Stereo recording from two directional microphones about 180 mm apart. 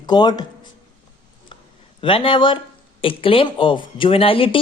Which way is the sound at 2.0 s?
30° left (ahead or behind).